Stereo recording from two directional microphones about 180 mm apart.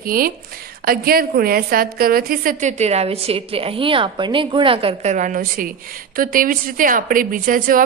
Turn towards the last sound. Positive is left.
turn(degrees=-50)  # may be behind; listen again after turning